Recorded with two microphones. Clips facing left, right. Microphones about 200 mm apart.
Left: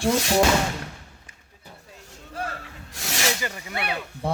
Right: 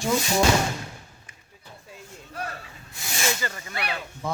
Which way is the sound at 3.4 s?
15° left (ahead or behind).